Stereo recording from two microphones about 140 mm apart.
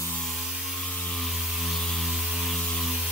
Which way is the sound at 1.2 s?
Centre (ahead or behind).